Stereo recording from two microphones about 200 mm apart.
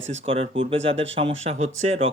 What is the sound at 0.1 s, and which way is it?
Speech, 30° right (ahead or behind).